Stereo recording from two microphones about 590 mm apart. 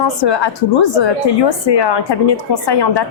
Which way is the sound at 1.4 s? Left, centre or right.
Left.